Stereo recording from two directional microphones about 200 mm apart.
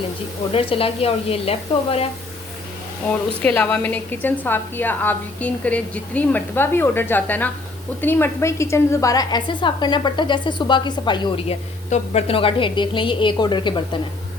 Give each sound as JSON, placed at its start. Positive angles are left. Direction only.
{"t": 0.5, "sound": "a woman's voice", "side_deg": 25}
{"t": 3.1, "sound": "a woman's voice", "side_deg": 10}